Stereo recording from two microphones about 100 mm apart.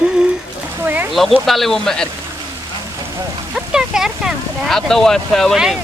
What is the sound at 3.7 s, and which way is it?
Speech, 5° right (ahead or behind).